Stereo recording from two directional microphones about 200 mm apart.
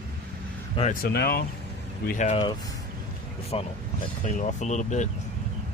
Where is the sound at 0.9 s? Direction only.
50° left (ahead or behind).